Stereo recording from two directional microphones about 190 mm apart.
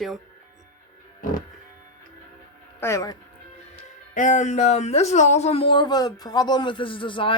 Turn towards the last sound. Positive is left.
turn(degrees=25)  # may be behind; listen again after turning